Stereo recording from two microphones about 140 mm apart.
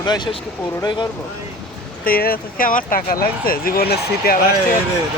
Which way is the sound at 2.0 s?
90° left.